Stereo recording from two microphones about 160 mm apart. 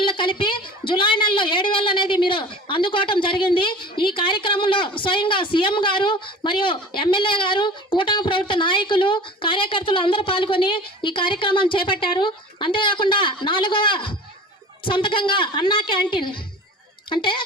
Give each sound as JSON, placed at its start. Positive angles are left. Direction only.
{"t": 0.0, "sound": "a woman's voice", "side_deg": 30}